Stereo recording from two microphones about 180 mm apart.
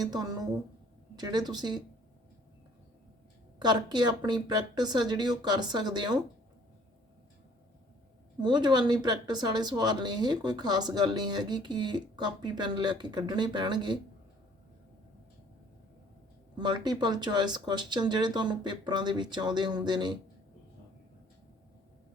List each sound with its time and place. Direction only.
0.0 s speech: 20° right (ahead or behind)
3.6 s speech: 25° right (ahead or behind)
8.4 s speech: 25° right (ahead or behind)
16.6 s speech: 25° right (ahead or behind)